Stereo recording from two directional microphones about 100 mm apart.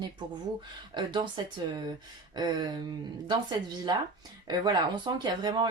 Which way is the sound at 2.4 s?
45° right (ahead or behind).